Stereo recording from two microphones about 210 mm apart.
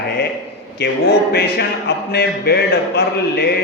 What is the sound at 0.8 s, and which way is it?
A man's voice, 50° left (ahead or behind).